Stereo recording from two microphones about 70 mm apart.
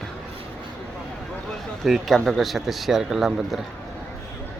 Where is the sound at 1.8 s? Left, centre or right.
Centre.